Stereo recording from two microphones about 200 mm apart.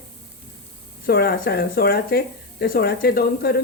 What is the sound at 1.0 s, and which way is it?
A woman's voice, 50° left (ahead or behind).